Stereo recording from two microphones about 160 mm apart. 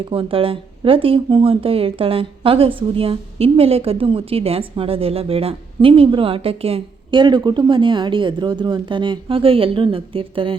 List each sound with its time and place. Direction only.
0.0 s speech: 35° right (ahead or behind)